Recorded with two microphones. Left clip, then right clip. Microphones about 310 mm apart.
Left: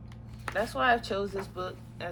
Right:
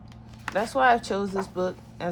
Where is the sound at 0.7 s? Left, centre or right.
Right.